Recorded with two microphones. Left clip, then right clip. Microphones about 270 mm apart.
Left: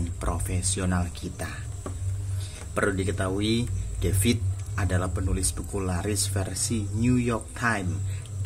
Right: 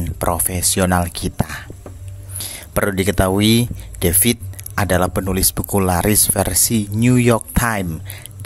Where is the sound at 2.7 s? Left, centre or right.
Right.